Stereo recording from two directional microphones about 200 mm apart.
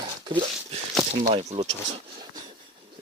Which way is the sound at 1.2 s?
30° right (ahead or behind).